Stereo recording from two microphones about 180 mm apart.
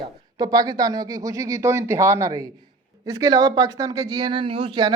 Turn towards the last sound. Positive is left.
turn(degrees=-25)  # may be behind; listen again after turning